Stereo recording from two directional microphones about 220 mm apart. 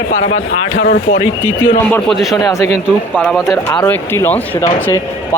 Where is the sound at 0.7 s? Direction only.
35° left (ahead or behind).